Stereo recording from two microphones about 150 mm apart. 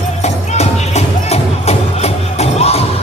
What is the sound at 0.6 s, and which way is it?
Music, 45° left (ahead or behind).